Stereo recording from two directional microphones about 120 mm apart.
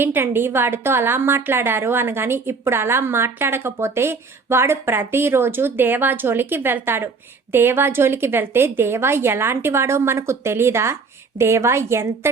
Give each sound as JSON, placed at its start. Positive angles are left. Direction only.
{"t": 0.0, "sound": "a woman's voice", "side_deg": -15}